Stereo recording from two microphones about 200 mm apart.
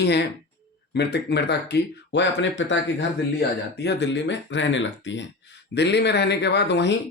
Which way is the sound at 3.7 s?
60° left (ahead or behind).